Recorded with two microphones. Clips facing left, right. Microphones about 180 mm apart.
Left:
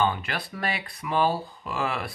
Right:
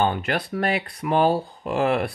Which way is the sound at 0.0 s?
55° right (ahead or behind).